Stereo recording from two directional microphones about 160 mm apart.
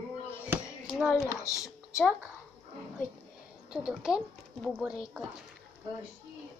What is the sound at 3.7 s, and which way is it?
Speech, 5° right (ahead or behind).